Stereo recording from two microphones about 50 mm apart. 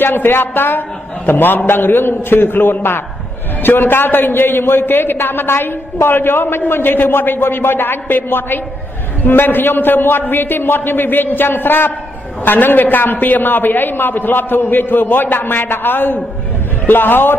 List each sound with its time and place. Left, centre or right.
0.0 s a man's voice: left